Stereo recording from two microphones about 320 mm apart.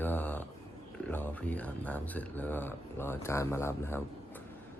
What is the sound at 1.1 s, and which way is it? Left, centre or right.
Speech, centre.